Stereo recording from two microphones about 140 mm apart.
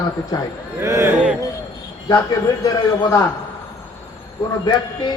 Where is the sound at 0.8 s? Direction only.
20° right (ahead or behind).